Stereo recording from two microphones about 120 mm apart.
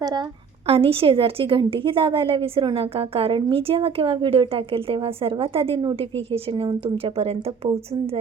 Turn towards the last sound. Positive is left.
turn(degrees=-55)  # may be behind; listen again after turning